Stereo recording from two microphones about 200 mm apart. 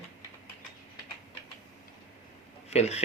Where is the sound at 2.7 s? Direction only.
35° left (ahead or behind).